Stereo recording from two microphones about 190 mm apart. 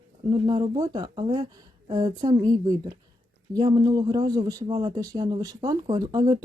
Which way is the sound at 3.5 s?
20° right (ahead or behind).